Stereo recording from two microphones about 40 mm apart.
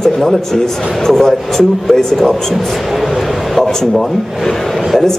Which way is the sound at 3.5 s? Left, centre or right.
Centre.